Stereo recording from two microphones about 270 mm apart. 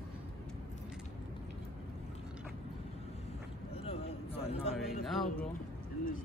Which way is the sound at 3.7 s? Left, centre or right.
Left.